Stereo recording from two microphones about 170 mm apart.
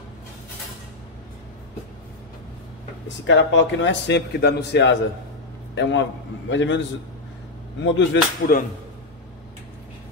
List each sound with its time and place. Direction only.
3.3 s a man's voice: 90° left
7.8 s a man's voice: 90° left